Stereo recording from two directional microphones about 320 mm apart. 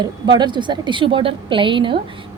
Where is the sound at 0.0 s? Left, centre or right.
Centre.